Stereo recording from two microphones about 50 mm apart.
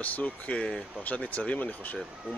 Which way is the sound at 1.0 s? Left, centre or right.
Left.